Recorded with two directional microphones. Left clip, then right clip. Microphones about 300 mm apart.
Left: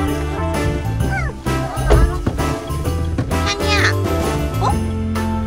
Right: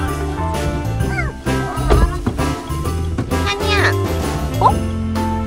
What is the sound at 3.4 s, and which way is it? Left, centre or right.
Music, centre.